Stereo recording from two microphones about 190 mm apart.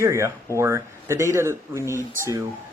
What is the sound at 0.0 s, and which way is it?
Speech, 15° right (ahead or behind).